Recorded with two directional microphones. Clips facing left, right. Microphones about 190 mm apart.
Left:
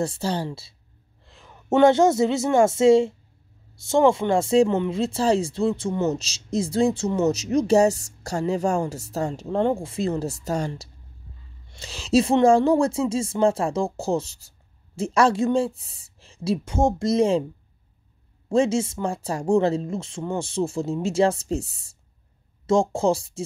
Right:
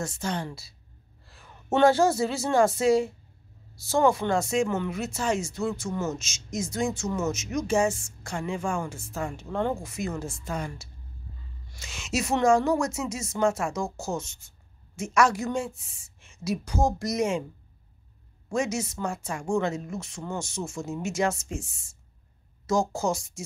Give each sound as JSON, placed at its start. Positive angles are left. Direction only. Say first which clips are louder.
{"t": 0.0, "sound": "a woman's voice", "louder": "left 6 dB", "side_deg": 30}
{"t": 18.5, "sound": "speech", "louder": "left 8 dB", "side_deg": 30}
{"t": 22.7, "sound": "speech", "louder": "left 6 dB", "side_deg": 30}